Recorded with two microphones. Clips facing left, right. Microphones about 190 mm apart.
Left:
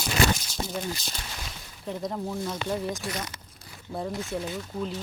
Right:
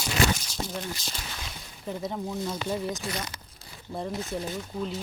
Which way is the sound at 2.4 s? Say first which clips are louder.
Right 1 dB; 5° right (ahead or behind).